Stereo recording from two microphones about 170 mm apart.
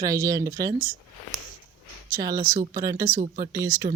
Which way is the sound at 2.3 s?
50° right (ahead or behind).